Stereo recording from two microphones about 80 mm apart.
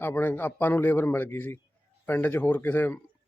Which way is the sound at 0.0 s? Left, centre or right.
Left.